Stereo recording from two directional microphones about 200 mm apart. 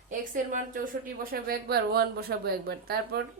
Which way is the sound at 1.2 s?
50° right (ahead or behind).